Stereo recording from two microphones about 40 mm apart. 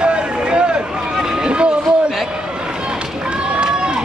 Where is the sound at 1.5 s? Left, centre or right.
Right.